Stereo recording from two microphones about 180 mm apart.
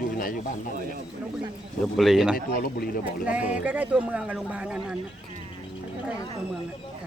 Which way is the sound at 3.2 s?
10° right (ahead or behind).